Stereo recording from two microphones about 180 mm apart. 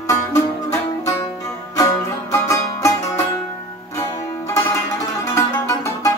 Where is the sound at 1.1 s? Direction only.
20° left (ahead or behind).